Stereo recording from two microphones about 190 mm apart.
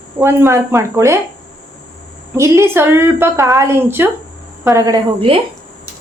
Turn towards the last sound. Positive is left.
turn(degrees=-25)  # may be behind; listen again after turning